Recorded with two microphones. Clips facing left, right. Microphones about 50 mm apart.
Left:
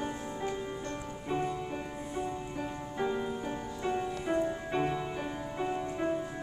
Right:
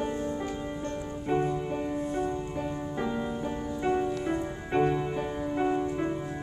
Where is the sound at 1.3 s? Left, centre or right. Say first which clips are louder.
Right 5 dB; centre.